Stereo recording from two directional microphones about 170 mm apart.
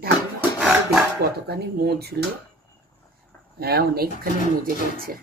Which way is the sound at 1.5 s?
70° right (ahead or behind).